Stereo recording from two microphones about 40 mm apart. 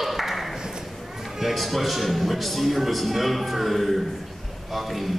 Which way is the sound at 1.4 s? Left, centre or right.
Centre.